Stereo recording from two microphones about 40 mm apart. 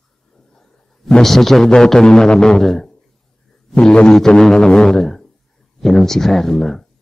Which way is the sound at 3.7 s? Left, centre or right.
Left.